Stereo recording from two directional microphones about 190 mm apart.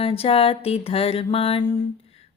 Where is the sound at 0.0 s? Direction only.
30° left (ahead or behind).